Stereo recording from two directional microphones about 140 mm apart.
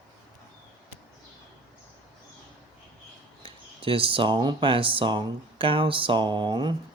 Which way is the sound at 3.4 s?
40° right (ahead or behind).